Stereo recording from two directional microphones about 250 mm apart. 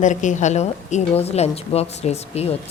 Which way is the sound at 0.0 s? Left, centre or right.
Left.